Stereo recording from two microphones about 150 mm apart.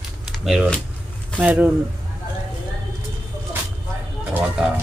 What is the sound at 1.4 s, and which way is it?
Speech, 10° right (ahead or behind).